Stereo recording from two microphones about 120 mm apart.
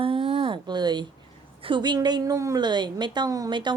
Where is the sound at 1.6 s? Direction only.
40° right (ahead or behind).